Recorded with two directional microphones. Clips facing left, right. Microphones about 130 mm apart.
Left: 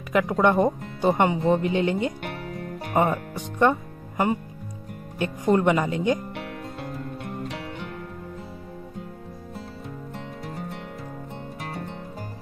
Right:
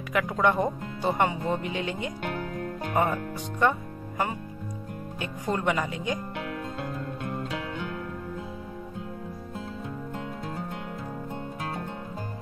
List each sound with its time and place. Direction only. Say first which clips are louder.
0.1 s speech: left 4 dB; 25° left (ahead or behind)
5.2 s speech: left 8 dB; 25° left (ahead or behind)